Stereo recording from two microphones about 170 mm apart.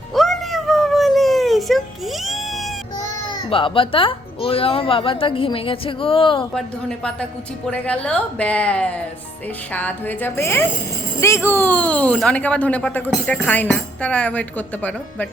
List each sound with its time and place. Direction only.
0.1 s a sound: centre (ahead or behind)
3.5 s speech: 30° left (ahead or behind)
6.5 s a woman's voice: 5° left (ahead or behind)